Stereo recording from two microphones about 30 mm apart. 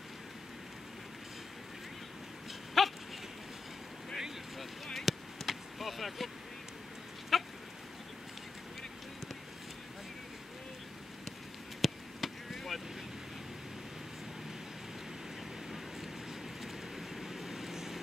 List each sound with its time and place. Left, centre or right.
2.8 s dog: centre
4.9 s a sound: centre
7.3 s goat: centre
11.8 s chop: centre
16.6 s vehicle: centre